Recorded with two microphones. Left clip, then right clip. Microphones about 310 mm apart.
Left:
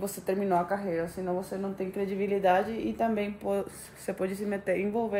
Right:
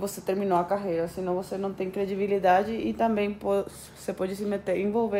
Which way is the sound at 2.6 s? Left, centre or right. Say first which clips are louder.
Right 3 dB; centre.